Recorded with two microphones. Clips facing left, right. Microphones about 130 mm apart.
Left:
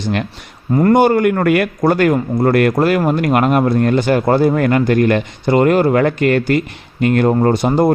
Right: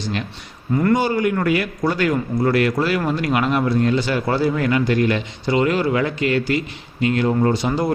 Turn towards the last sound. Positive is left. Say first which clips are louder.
# left 6 dB
turn(degrees=55)  # may be behind; listen again after turning